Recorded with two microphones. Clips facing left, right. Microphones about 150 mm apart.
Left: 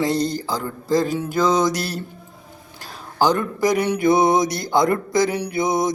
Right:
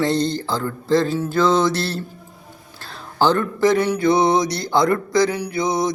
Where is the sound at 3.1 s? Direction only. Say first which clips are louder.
Right 1 dB; 15° left (ahead or behind).